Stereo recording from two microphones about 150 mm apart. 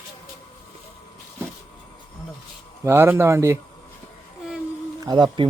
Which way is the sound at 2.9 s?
15° right (ahead or behind).